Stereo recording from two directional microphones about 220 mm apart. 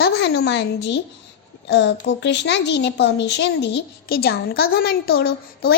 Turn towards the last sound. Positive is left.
turn(degrees=45)  # may be behind; listen again after turning